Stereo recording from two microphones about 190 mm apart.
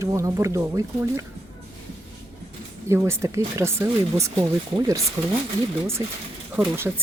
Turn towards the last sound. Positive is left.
turn(degrees=-10)  # may be behind; listen again after turning